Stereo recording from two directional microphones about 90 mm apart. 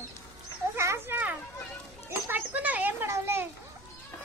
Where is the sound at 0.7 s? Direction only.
30° right (ahead or behind).